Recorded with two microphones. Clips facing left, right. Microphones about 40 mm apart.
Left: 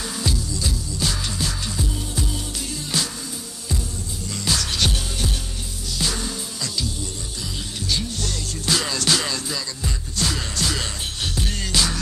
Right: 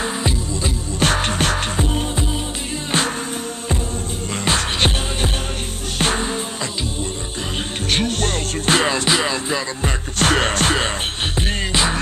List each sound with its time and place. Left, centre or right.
0.9 s music: right
4.5 s music: right
7.9 s music: right
9.8 s music: right